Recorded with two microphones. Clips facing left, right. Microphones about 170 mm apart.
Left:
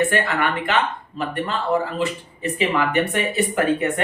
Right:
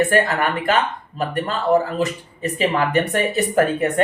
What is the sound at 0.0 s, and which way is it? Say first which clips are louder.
Speech: right 3 dB; 40° right (ahead or behind).